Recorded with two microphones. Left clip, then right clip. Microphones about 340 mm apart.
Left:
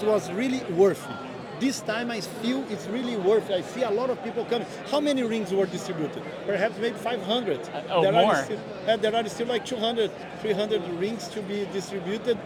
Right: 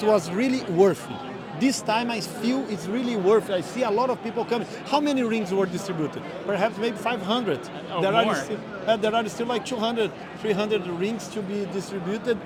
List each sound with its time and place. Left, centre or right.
0.0 s speech: centre
11.5 s speech: centre